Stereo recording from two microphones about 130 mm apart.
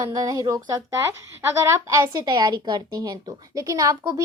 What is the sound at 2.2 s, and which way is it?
A child's voice, 35° right (ahead or behind).